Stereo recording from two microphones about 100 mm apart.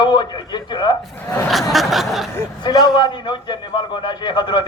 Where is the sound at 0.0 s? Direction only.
45° left (ahead or behind).